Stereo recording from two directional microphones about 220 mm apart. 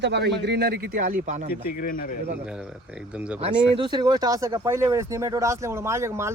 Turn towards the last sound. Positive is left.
turn(degrees=-10)  # may be behind; listen again after turning